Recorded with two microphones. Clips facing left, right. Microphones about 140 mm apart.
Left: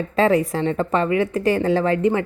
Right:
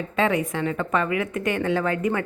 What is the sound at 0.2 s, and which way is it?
A woman's voice, 35° left (ahead or behind).